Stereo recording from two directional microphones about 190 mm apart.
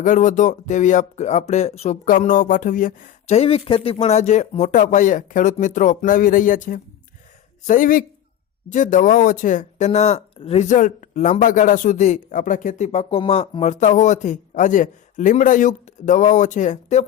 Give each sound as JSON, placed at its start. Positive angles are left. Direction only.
{"t": 0.0, "sound": "speech", "side_deg": 40}